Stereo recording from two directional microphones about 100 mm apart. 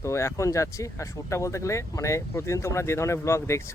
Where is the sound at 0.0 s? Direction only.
30° left (ahead or behind).